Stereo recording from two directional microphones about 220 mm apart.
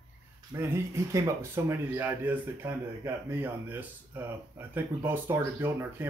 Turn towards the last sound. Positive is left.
turn(degrees=-10)  # may be behind; listen again after turning